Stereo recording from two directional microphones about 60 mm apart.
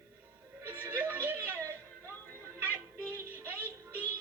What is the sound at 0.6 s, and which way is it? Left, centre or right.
Music, right.